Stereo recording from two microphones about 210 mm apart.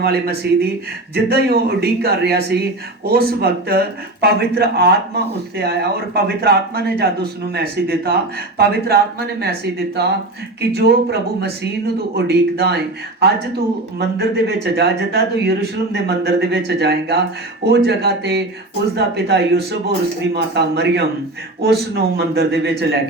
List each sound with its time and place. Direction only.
0.0 s speech: 50° right (ahead or behind)